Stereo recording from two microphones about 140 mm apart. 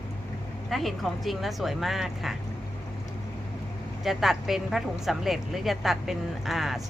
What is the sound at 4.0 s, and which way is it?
A woman's voice, centre (ahead or behind).